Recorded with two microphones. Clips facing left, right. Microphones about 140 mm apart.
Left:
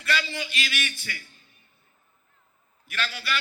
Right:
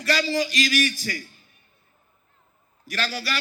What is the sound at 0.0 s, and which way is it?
A man's voice, 40° right (ahead or behind).